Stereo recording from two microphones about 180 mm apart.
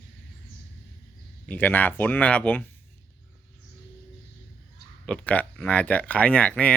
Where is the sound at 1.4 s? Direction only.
10° left (ahead or behind).